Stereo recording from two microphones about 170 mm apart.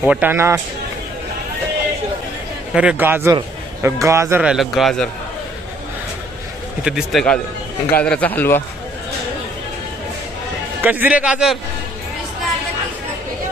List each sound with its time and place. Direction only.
0.0 s a man's voice: 10° right (ahead or behind)
2.7 s a man's voice: 5° right (ahead or behind)
4.4 s speech: 5° right (ahead or behind)
6.8 s a man's voice: 5° right (ahead or behind); by 8.6 s 10° left (ahead or behind)
10.8 s a man's voice: 10° right (ahead or behind)